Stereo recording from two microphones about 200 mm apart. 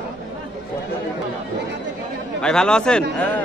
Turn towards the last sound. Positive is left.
turn(degrees=10)  # may be behind; listen again after turning